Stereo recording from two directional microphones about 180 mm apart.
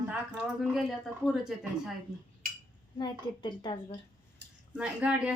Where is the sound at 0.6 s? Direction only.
Centre (ahead or behind).